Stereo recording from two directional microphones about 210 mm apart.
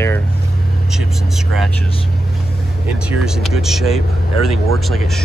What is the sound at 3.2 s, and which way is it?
Speech, centre (ahead or behind).